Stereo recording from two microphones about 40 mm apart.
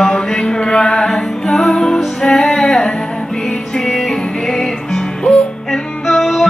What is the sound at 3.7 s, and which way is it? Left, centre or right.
Music, centre.